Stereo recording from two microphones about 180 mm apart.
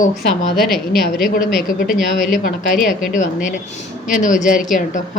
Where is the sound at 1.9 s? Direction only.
Centre (ahead or behind).